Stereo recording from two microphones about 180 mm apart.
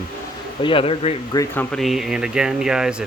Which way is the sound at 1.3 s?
15° left (ahead or behind).